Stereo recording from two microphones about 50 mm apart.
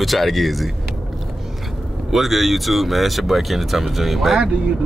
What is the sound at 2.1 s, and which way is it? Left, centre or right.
Speech, centre.